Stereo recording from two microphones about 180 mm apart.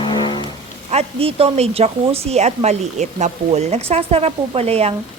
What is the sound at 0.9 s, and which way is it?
Speech, 35° right (ahead or behind).